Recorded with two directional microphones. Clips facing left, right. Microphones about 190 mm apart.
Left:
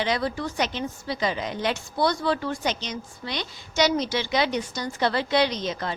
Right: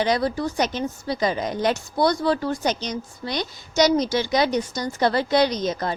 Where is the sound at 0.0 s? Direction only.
40° right (ahead or behind).